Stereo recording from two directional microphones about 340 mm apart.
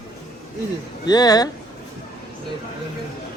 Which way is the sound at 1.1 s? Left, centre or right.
Centre.